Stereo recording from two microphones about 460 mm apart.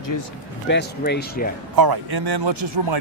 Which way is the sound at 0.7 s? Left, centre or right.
Left.